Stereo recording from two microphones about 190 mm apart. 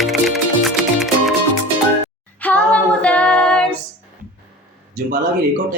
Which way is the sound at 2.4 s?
5° left (ahead or behind).